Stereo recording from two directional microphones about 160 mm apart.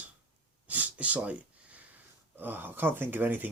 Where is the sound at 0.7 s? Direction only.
10° right (ahead or behind).